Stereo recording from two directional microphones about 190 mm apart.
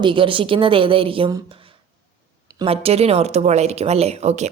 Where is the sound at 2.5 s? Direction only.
30° right (ahead or behind).